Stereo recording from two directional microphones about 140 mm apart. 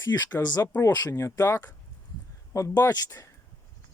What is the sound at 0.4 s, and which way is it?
Speech, 25° left (ahead or behind).